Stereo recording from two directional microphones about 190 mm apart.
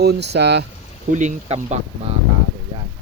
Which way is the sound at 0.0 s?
60° right (ahead or behind).